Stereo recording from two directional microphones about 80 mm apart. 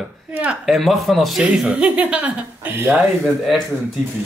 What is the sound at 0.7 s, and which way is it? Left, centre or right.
Speech, centre.